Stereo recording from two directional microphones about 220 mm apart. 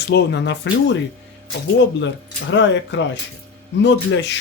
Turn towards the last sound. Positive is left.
turn(degrees=55)  # may be behind; listen again after turning